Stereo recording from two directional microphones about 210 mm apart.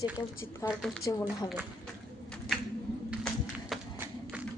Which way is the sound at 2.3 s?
5° left (ahead or behind).